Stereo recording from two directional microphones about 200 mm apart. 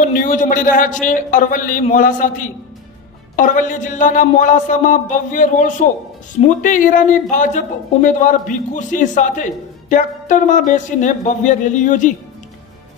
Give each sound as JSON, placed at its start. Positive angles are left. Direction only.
{"t": 0.1, "sound": "speech", "side_deg": 40}